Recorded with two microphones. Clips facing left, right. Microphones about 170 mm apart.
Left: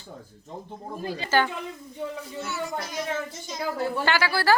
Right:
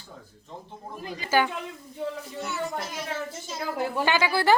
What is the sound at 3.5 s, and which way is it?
A woman's voice, 15° right (ahead or behind).